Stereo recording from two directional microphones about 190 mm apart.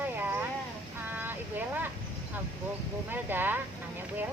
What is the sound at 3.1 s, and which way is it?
Speech, 10° right (ahead or behind).